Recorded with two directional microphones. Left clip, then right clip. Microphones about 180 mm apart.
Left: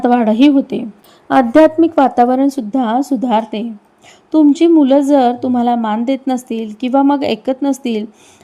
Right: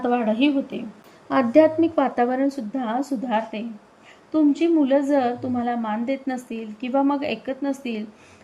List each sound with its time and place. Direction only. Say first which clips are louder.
0.0 s a woman's voice: left 10 dB; 30° left (ahead or behind)
1.3 s a woman's voice: left 8 dB; 15° left (ahead or behind)